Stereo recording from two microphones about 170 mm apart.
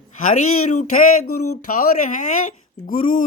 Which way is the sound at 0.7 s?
45° left (ahead or behind).